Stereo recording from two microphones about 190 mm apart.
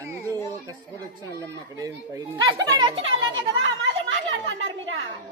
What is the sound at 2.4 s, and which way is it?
Speech, 20° right (ahead or behind).